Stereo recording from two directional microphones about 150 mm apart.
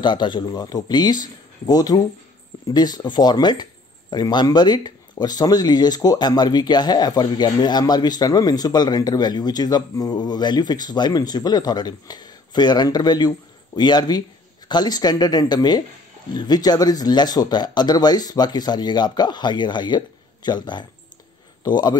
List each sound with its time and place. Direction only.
0.0 s speech: 30° left (ahead or behind)